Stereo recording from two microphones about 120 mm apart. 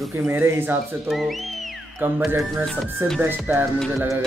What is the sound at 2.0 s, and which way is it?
Speech, 20° right (ahead or behind).